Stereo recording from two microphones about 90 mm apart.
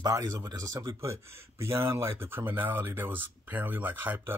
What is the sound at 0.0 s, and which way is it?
Speech, 45° right (ahead or behind).